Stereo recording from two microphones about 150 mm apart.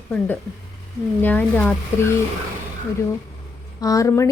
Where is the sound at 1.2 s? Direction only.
10° left (ahead or behind).